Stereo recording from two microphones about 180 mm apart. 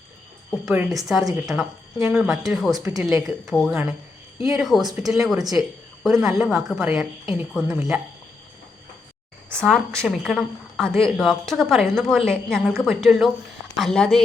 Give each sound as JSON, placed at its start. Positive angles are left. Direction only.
{"t": 0.6, "sound": "a woman's voice", "side_deg": -5}
{"t": 2.7, "sound": "speech", "side_deg": -20}
{"t": 3.2, "sound": "a woman's voice", "side_deg": 0}
{"t": 9.5, "sound": "a woman's voice", "side_deg": 5}